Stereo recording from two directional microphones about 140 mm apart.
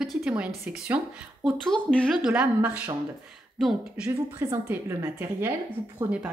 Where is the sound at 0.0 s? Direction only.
5° right (ahead or behind).